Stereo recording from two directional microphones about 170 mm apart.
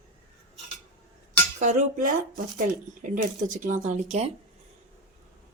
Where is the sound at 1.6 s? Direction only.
45° right (ahead or behind).